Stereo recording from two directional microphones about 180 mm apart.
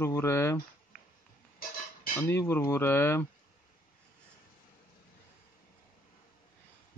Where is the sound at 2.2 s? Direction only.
15° left (ahead or behind).